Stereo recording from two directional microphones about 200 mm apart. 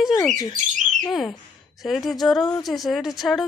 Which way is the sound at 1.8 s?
Centre (ahead or behind).